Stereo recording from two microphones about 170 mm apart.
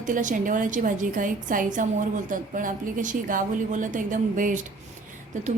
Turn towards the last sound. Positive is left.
turn(degrees=-45)  # may be behind; listen again after turning